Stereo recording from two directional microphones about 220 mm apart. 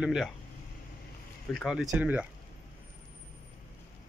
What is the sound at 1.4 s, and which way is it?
Speech, centre (ahead or behind).